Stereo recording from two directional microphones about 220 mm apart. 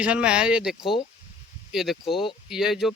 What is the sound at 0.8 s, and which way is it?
Speech, 20° left (ahead or behind).